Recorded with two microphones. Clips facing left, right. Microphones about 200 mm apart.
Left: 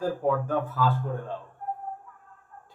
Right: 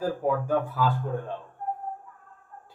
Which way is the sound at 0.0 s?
5° right (ahead or behind).